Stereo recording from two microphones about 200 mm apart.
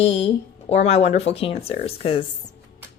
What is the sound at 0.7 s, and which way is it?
A woman's voice, 30° left (ahead or behind).